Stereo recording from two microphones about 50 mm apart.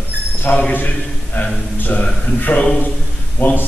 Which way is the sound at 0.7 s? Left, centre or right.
Left.